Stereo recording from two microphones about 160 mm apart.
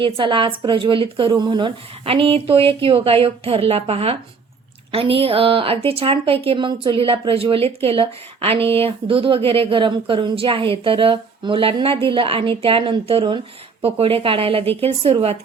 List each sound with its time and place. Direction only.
0.0 s a woman's voice: 30° right (ahead or behind)